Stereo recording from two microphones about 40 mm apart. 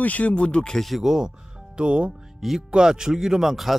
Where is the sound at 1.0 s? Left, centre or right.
Centre.